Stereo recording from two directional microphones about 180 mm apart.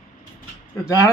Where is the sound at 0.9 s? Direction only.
20° left (ahead or behind).